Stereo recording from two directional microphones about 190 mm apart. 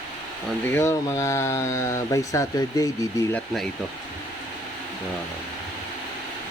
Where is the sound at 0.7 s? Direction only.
15° left (ahead or behind).